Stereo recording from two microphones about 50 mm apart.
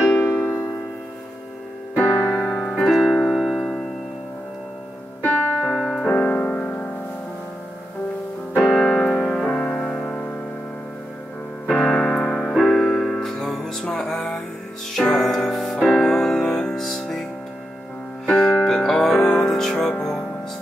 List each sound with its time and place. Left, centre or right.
2.0 s keyboard: left
2.3 s keyboard: left
2.9 s music: centre
5.2 s music: left
5.7 s keyboard: centre
6.1 s music: left
8.6 s keyboard: centre
9.4 s music: centre
11.7 s keyboard: centre
12.5 s music: centre
16.8 s music: centre
18.2 s music: centre